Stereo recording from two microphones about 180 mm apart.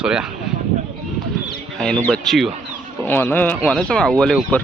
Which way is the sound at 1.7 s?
5° left (ahead or behind).